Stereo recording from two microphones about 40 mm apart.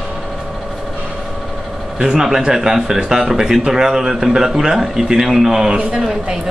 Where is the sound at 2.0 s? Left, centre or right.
Centre.